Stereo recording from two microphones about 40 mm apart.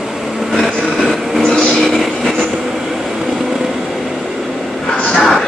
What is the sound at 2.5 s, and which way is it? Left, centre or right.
Train, centre.